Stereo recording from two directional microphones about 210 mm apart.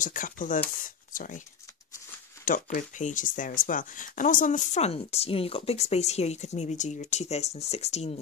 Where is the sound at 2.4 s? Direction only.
40° left (ahead or behind).